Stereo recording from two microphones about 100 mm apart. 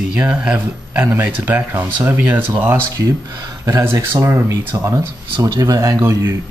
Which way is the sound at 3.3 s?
30° right (ahead or behind).